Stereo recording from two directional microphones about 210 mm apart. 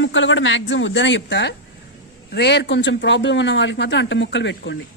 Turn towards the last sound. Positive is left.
turn(degrees=55)  # may be behind; listen again after turning